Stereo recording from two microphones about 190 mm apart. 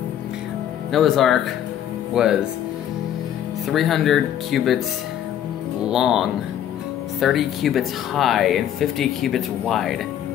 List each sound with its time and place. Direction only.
0.9 s speech: centre (ahead or behind)
3.6 s speech: centre (ahead or behind)
5.9 s speech: 5° right (ahead or behind)